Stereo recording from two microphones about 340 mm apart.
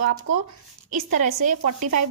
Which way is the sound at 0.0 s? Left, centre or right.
Right.